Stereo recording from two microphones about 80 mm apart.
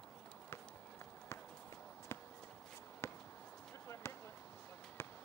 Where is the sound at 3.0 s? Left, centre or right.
Left.